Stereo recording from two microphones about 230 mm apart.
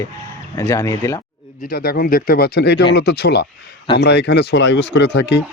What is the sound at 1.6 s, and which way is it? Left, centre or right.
Speech, left.